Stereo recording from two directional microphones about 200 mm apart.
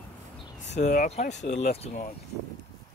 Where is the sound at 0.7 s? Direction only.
35° left (ahead or behind).